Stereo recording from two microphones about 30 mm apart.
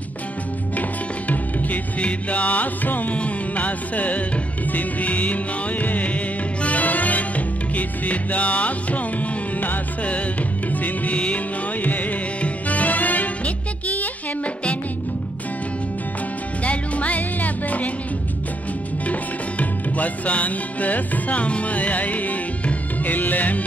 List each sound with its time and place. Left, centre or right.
2.0 s music: left
3.5 s music: left
10.7 s music: left
16.6 s music: left
19.6 s music: left
23.0 s music: left